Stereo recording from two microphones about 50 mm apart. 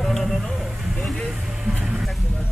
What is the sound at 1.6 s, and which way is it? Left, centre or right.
Vehicle, centre.